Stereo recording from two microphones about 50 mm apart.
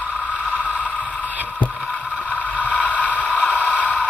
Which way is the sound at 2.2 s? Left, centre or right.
Left.